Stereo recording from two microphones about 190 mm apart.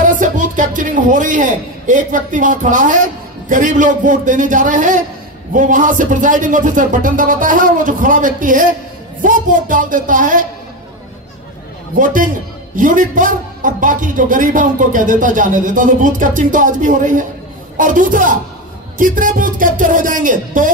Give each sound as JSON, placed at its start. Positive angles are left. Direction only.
{"t": 0.0, "sound": "a man's voice", "side_deg": -45}
{"t": 12.0, "sound": "a man's voice", "side_deg": -45}